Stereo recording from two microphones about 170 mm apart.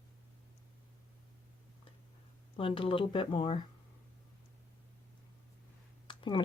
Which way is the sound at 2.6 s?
30° left (ahead or behind).